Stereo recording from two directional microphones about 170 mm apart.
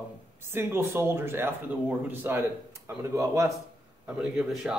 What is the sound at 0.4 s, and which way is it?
Speech, 15° right (ahead or behind).